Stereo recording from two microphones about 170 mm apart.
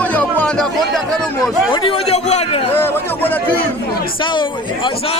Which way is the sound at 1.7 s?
30° left (ahead or behind).